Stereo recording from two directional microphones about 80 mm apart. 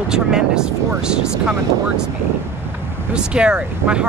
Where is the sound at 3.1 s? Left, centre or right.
Centre.